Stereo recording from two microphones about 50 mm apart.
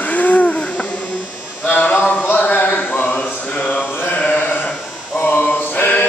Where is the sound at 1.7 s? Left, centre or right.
Left.